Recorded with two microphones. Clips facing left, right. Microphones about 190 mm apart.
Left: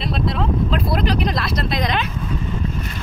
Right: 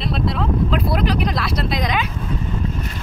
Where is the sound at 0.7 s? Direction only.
10° right (ahead or behind).